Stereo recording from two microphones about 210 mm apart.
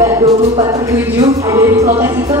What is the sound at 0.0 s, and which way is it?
Music, 15° right (ahead or behind).